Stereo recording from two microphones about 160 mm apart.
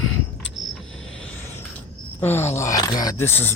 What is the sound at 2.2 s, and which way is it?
Speech, 15° left (ahead or behind).